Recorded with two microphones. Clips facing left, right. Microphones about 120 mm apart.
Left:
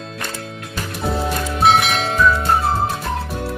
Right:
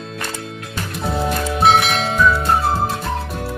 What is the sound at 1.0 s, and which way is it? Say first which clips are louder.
Music: right 1 dB; centre (ahead or behind).